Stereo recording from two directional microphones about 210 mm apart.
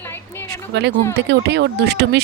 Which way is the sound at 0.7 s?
55° right (ahead or behind).